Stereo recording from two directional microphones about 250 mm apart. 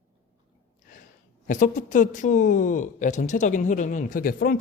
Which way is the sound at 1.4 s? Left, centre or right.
Left.